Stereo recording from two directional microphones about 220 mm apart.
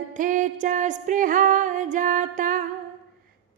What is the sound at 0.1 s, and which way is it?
Music, 35° right (ahead or behind).